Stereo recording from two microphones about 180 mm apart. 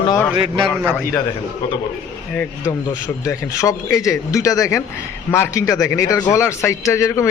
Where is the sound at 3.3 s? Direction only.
15° left (ahead or behind).